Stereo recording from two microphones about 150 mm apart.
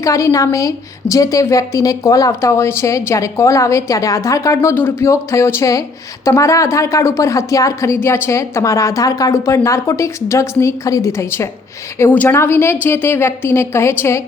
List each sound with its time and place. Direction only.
0.0 s a woman's voice: 20° left (ahead or behind)